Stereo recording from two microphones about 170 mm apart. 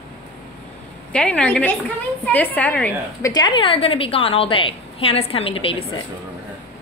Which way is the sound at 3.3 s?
25° left (ahead or behind).